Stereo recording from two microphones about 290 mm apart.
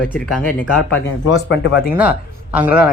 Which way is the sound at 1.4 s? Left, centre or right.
Left.